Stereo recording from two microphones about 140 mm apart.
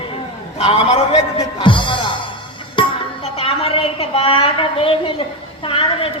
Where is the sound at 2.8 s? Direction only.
35° left (ahead or behind).